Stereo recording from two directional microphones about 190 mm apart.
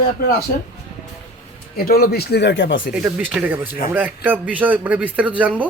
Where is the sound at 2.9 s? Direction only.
5° right (ahead or behind).